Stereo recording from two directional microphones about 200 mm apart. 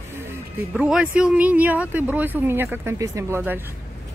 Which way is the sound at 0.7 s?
5° right (ahead or behind).